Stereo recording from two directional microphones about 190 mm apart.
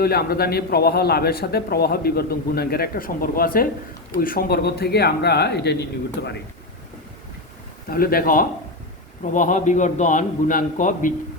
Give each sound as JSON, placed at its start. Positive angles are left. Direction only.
{"t": 0.0, "sound": "a man's voice", "side_deg": 55}
{"t": 7.9, "sound": "a man's voice", "side_deg": 50}